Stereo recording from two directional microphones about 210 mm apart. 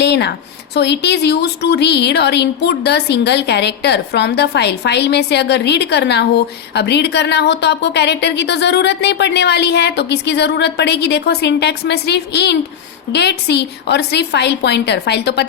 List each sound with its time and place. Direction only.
0.0 s a woman's voice: 55° left (ahead or behind)